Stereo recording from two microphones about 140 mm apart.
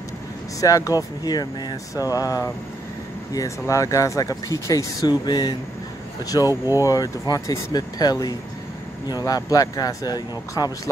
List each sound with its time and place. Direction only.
0.6 s speech: 25° left (ahead or behind)
6.5 s speech: 20° right (ahead or behind)
6.8 s speech: 25° left (ahead or behind)